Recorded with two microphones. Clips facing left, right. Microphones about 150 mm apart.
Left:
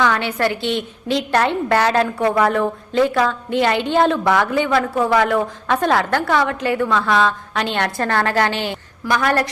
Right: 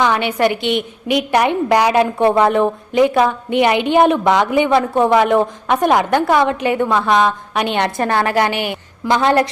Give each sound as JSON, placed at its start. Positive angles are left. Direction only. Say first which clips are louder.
{"t": 0.0, "sound": "a woman's voice", "louder": "right 3 dB", "side_deg": -20}